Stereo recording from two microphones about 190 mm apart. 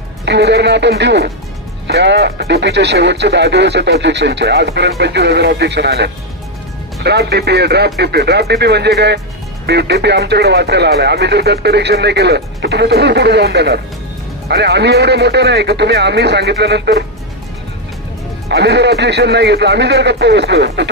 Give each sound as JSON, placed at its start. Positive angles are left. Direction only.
{"t": 0.2, "sound": "speech", "side_deg": -65}
{"t": 18.5, "sound": "speech", "side_deg": -65}